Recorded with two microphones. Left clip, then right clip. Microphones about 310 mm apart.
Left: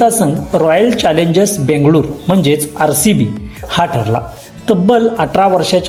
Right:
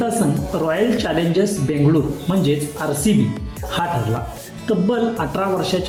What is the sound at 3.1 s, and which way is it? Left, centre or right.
Speech, left.